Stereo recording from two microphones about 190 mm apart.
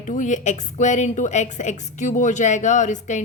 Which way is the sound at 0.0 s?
40° left (ahead or behind).